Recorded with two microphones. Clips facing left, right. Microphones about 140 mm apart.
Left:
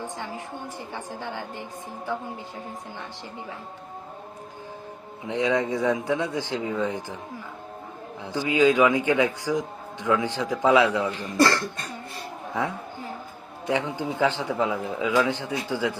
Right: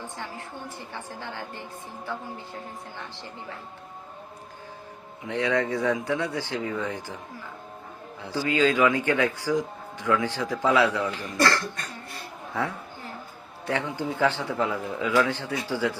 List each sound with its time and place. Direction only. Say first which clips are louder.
0.0 s a man's voice: left 3 dB; 15° left (ahead or behind)
5.2 s a man's voice: left 1 dB; 15° left (ahead or behind)
8.2 s a man's voice: left 3 dB; 20° left (ahead or behind)